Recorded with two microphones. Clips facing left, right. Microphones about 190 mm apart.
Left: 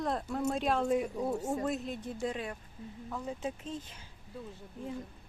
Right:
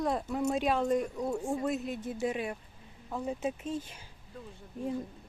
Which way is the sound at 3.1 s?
20° right (ahead or behind).